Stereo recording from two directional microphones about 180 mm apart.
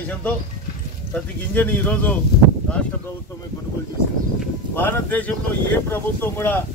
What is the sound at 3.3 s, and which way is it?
Speech, 15° left (ahead or behind).